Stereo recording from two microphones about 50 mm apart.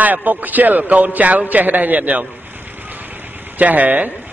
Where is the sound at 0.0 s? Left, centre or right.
Right.